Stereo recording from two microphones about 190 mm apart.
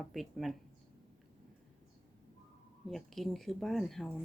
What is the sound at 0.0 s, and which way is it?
Speech, centre (ahead or behind).